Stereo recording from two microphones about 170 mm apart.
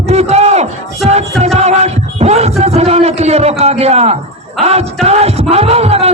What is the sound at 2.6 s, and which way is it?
A man's voice, 40° right (ahead or behind).